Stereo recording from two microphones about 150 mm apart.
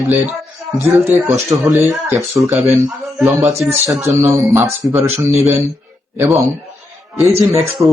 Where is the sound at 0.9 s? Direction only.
15° right (ahead or behind).